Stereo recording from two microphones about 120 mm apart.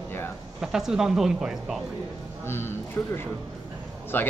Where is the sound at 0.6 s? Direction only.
5° right (ahead or behind).